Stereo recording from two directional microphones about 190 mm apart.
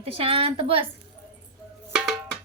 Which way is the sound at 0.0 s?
30° right (ahead or behind).